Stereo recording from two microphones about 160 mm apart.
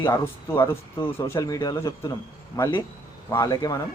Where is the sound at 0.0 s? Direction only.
15° left (ahead or behind).